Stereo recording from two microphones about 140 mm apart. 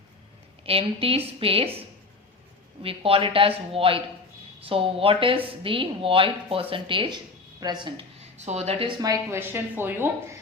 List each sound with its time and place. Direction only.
0.6 s speech: 40° right (ahead or behind)
2.8 s speech: 40° right (ahead or behind)
8.4 s speech: 50° right (ahead or behind)
9.0 s a woman's voice: 20° right (ahead or behind)